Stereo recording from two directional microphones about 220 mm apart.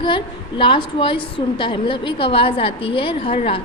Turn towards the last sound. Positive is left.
turn(degrees=25)  # may be behind; listen again after turning